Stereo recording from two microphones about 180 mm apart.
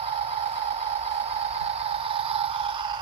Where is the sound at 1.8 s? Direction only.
30° right (ahead or behind).